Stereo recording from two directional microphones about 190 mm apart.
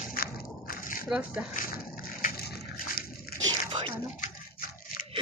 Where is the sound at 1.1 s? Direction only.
5° right (ahead or behind).